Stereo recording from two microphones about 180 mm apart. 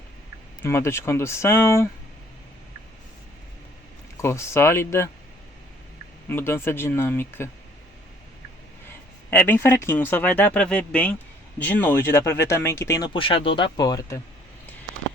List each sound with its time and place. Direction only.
0.6 s speech: 15° left (ahead or behind)
4.2 s speech: 15° left (ahead or behind)
6.2 s speech: 10° left (ahead or behind)
9.3 s speech: 10° left (ahead or behind)
13.1 s speech: 30° left (ahead or behind)